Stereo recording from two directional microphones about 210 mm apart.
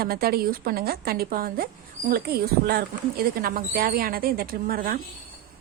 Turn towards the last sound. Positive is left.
turn(degrees=-45)  # may be behind; listen again after turning